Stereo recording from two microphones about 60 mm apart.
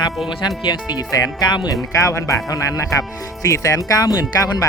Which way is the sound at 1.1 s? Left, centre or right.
Left.